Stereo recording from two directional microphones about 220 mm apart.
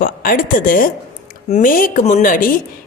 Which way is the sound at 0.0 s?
40° left (ahead or behind).